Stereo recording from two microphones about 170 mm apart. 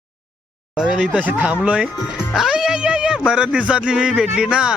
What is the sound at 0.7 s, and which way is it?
Speech, 5° right (ahead or behind).